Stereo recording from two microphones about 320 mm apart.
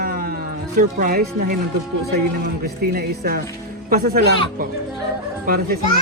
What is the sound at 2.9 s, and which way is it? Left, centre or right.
Speech, right.